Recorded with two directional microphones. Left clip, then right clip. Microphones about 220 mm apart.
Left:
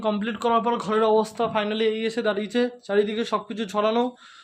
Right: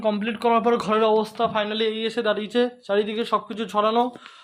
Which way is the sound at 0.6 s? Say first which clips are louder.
Right 4 dB; 20° right (ahead or behind).